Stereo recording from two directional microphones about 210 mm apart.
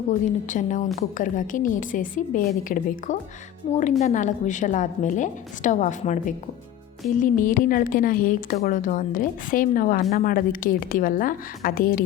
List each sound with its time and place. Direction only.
0.3 s a woman's voice: 35° left (ahead or behind)